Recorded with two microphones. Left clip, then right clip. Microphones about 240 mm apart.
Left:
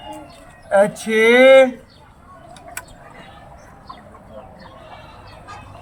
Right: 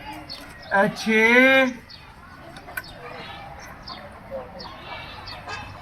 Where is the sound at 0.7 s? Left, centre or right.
Centre.